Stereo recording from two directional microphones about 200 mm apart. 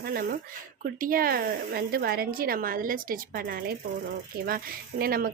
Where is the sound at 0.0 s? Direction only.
50° right (ahead or behind).